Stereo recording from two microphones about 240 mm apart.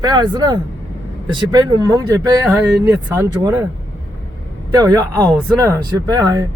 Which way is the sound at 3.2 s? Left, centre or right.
Centre.